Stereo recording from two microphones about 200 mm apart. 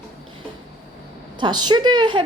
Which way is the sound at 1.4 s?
20° right (ahead or behind).